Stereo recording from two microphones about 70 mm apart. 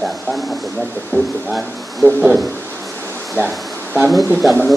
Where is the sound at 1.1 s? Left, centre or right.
Left.